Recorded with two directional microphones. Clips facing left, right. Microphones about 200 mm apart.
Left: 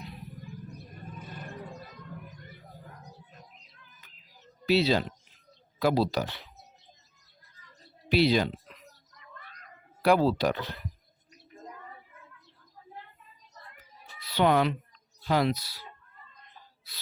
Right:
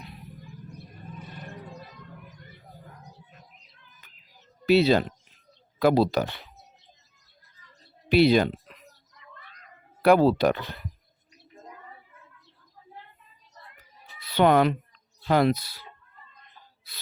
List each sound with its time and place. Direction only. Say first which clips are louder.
4.6 s speech: right 5 dB; 55° right (ahead or behind)
8.1 s speech: right 5 dB; 55° right (ahead or behind)
9.1 s a sound: left 1 dB; 45° left (ahead or behind)
10.0 s speech: right 5 dB; 55° right (ahead or behind)
14.2 s speech: right 4 dB; 55° right (ahead or behind)